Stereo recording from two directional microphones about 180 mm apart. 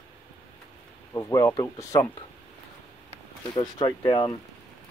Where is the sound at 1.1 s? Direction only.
15° left (ahead or behind).